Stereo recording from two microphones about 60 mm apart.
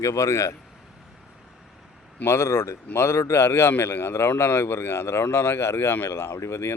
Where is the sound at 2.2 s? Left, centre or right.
Left.